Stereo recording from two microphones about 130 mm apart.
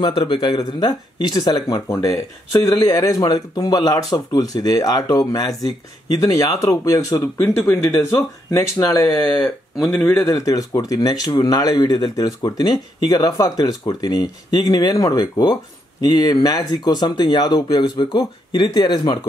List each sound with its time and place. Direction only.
0.2 s speech: 35° left (ahead or behind)
9.4 s speech: centre (ahead or behind)
10.0 s speech: 25° left (ahead or behind)